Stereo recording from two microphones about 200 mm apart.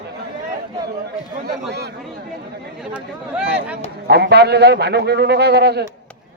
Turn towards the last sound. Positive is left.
turn(degrees=-55)  # may be behind; listen again after turning